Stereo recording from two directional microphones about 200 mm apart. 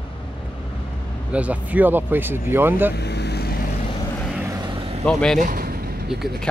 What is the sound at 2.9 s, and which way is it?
Speech, 55° left (ahead or behind).